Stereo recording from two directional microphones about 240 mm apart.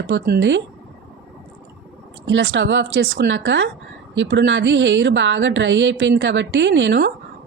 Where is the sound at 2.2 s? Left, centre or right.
Right.